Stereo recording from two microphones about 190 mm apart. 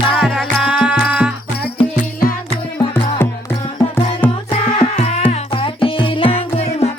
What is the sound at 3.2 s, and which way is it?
Music, 10° left (ahead or behind).